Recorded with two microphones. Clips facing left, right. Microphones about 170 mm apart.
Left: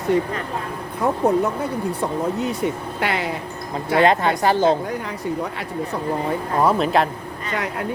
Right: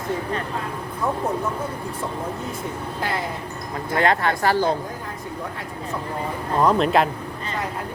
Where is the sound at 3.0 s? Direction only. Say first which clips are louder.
Left 4 dB; 75° left (ahead or behind).